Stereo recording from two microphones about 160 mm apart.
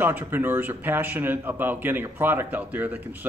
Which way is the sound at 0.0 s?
15° right (ahead or behind).